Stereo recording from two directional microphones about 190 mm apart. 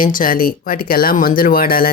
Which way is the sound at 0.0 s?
45° left (ahead or behind).